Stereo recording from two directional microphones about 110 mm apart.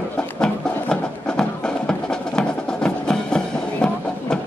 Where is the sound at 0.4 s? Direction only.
5° left (ahead or behind).